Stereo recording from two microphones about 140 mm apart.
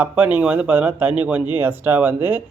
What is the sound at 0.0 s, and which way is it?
A man's voice, 10° right (ahead or behind).